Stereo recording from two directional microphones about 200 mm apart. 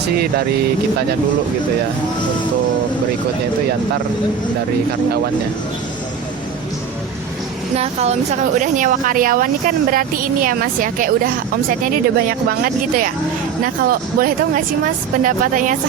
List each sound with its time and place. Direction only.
7.8 s a woman's voice: 30° right (ahead or behind)